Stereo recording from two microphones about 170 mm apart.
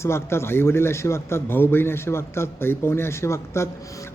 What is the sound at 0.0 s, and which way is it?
A man's voice, 15° left (ahead or behind).